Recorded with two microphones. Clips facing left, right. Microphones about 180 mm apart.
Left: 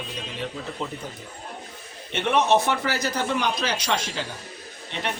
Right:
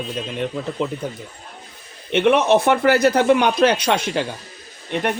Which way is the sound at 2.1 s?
60° right (ahead or behind).